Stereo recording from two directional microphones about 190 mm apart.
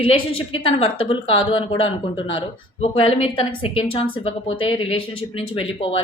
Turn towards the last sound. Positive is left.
turn(degrees=30)  # may be behind; listen again after turning